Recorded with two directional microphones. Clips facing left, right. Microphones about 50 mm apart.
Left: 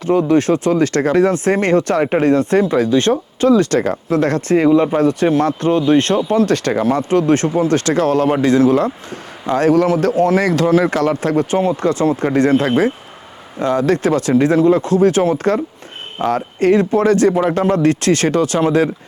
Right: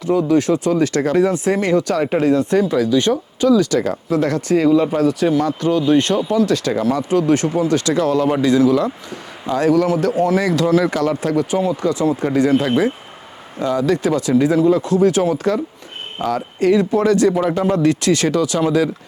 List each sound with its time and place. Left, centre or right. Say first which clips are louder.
0.1 s speech: left 2 dB; left